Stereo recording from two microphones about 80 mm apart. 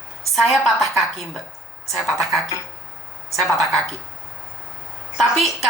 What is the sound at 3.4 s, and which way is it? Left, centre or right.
Speech, centre.